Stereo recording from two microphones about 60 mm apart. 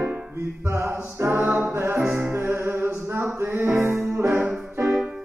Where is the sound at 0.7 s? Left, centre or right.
Right.